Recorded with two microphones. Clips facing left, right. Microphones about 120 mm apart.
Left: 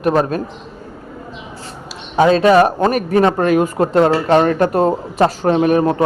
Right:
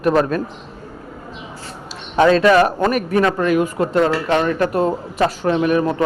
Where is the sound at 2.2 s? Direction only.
20° left (ahead or behind); by 4.6 s 45° left (ahead or behind).